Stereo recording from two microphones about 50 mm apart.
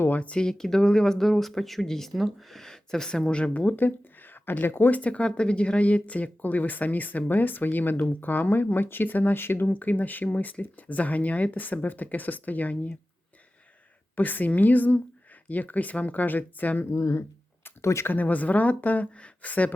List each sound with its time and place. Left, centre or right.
0.1 s speech: left
0.4 s speech: centre; by 3.8 s left
3.8 s speech: left
4.9 s speech: left
9.7 s speech: left
14.2 s speech: left
16.9 s speech: left
18.0 s speech: left